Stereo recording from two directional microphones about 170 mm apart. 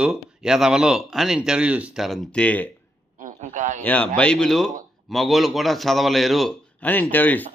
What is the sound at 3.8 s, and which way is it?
A man's voice, 10° left (ahead or behind).